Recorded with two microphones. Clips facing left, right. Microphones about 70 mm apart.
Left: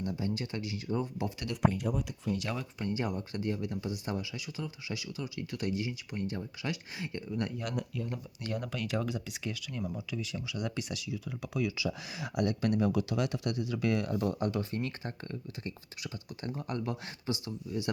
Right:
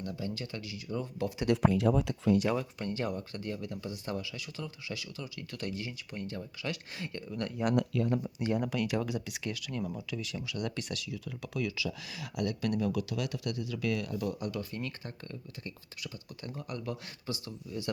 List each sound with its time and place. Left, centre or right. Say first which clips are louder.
0.0 s speech: left 3 dB; left
1.5 s speech: right 5 dB; right
2.5 s speech: right 5 dB; centre
2.8 s speech: left 1 dB; centre
3.2 s speech: left 3 dB; left
7.8 s speech: right 7 dB; right
8.4 s speech: right 2 dB; right
8.6 s speech: right 2 dB; centre
11.9 s speech: left 3 dB; left